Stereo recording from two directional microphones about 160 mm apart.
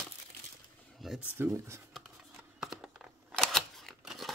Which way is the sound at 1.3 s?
15° right (ahead or behind).